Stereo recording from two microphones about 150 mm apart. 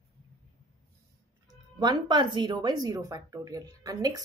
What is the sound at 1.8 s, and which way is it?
Speech, 30° right (ahead or behind).